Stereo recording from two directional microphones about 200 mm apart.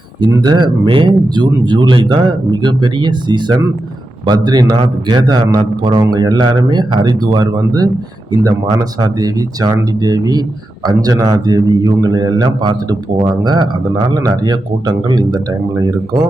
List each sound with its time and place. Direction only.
0.2 s a man's voice: 20° right (ahead or behind)